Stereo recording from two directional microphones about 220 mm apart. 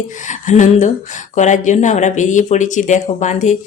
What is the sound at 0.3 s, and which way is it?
A woman's voice, 35° left (ahead or behind).